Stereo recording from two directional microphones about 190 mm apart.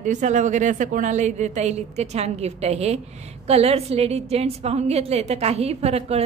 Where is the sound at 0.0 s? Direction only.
40° right (ahead or behind).